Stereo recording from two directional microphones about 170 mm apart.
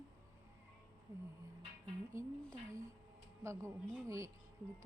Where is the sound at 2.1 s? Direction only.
15° right (ahead or behind).